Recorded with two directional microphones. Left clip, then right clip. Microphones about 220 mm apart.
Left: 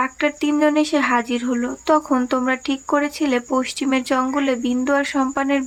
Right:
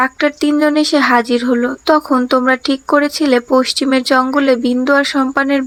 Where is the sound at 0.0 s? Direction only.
20° right (ahead or behind).